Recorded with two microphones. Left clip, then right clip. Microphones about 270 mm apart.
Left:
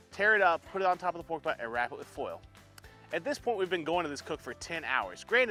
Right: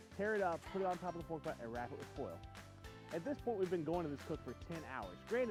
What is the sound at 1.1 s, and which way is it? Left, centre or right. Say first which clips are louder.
Speech: left 11 dB; left.